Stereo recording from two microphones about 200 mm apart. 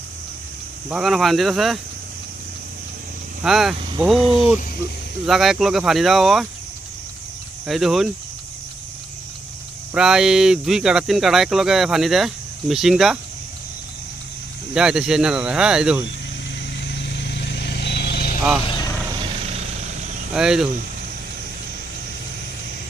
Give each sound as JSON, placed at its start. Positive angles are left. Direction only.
{"t": 0.9, "sound": "speech", "side_deg": 0}
{"t": 3.4, "sound": "speech", "side_deg": 0}
{"t": 3.8, "sound": "speech", "side_deg": -25}
{"t": 4.0, "sound": "speech", "side_deg": 0}
{"t": 4.3, "sound": "speech", "side_deg": 25}
{"t": 5.2, "sound": "speech", "side_deg": 0}
{"t": 7.7, "sound": "speech", "side_deg": 0}
{"t": 9.9, "sound": "speech", "side_deg": -5}
{"t": 14.7, "sound": "speech", "side_deg": -5}
{"t": 16.8, "sound": "vehicle", "side_deg": 60}
{"t": 18.6, "sound": "vehicle", "side_deg": 20}
{"t": 19.2, "sound": "vehicle", "side_deg": -30}
{"t": 20.3, "sound": "speech", "side_deg": -5}